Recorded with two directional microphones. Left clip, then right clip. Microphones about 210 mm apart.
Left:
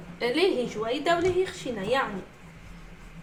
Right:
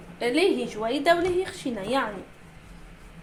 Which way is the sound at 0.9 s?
50° right (ahead or behind).